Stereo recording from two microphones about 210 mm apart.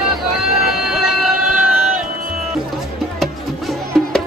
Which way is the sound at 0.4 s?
5° right (ahead or behind).